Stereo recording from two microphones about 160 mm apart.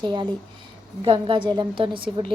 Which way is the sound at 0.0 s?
30° right (ahead or behind).